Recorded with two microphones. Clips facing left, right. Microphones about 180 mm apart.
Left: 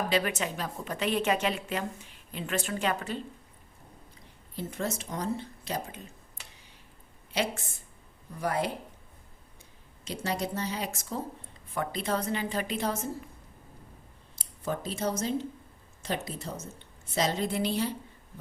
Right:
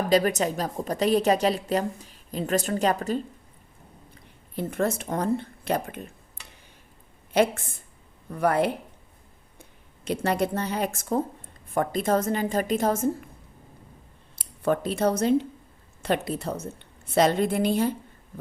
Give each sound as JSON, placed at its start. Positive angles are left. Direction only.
{"t": 0.1, "sound": "a woman's voice", "side_deg": -40}
{"t": 4.5, "sound": "a woman's voice", "side_deg": -55}
{"t": 7.3, "sound": "a woman's voice", "side_deg": -55}
{"t": 14.3, "sound": "a woman's voice", "side_deg": -65}